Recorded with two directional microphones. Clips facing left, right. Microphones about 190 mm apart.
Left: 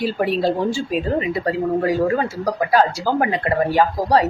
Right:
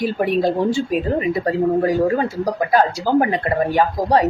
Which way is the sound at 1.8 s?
20° right (ahead or behind).